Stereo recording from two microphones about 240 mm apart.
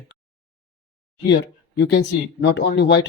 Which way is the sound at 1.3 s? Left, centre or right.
Left.